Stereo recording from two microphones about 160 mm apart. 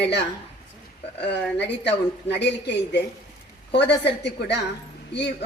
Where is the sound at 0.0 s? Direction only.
90° left.